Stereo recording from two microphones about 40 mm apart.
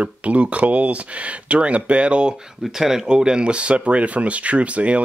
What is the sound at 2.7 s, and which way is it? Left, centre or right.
Speech, centre.